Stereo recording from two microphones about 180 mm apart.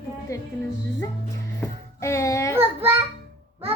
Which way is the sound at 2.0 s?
15° left (ahead or behind).